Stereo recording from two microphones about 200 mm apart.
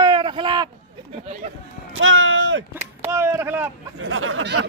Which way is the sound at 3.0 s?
10° right (ahead or behind).